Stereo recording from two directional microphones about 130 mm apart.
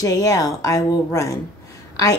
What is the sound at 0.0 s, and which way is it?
Speech, 25° left (ahead or behind).